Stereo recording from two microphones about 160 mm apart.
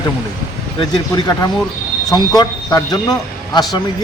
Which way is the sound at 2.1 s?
25° left (ahead or behind).